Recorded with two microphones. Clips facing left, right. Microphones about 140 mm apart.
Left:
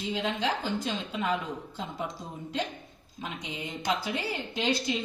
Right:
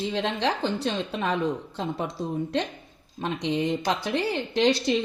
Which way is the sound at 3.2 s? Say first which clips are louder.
Right 11 dB; 85° right.